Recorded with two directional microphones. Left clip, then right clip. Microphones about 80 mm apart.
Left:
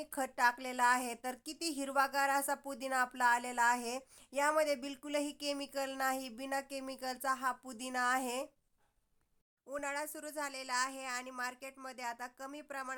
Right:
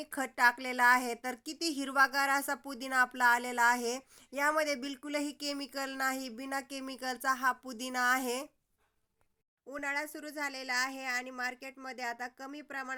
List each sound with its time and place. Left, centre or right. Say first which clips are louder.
0.0 s speech: right 4 dB; right
9.6 s speech: right 3 dB; right